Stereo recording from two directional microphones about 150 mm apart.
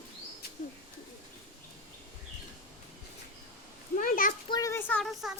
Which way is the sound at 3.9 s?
65° left (ahead or behind).